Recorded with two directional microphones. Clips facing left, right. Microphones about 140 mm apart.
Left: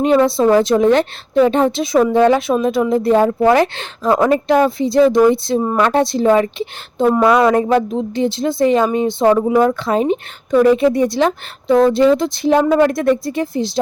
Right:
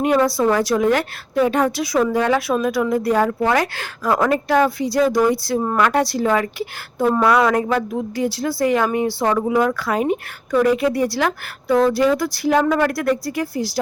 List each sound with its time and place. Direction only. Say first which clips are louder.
0.0 s a woman's voice: left 4 dB; 25° left (ahead or behind)